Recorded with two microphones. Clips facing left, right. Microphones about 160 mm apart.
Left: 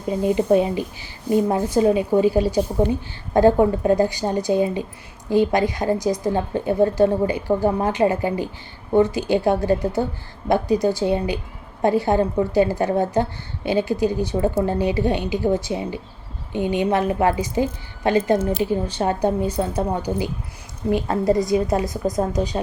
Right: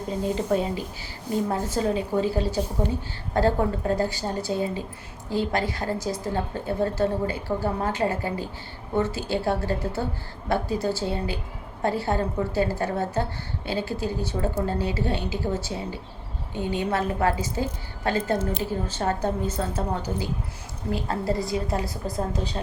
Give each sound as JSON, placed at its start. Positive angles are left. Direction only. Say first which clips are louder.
{"t": 0.2, "sound": "a woman's voice", "louder": "left 7 dB", "side_deg": 15}